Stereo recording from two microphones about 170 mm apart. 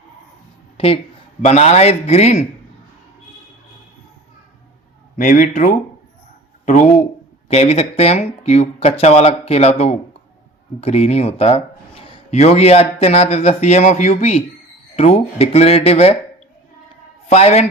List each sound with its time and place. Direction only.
1.4 s speech: 40° left (ahead or behind)
5.1 s speech: 55° left (ahead or behind)
7.4 s speech: 40° left (ahead or behind)
17.2 s a man's voice: 40° left (ahead or behind)